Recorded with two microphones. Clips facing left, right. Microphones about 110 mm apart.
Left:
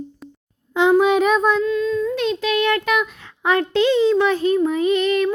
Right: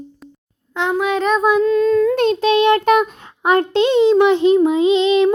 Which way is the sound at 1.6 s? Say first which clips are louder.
Right 6 dB; 45° right (ahead or behind).